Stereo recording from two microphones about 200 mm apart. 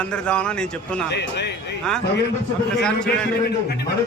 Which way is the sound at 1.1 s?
60° left (ahead or behind).